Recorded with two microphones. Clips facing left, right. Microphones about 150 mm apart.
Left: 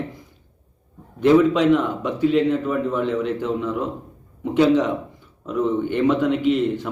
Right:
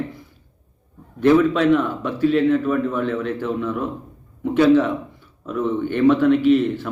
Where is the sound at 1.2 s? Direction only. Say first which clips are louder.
Even; 15° left (ahead or behind).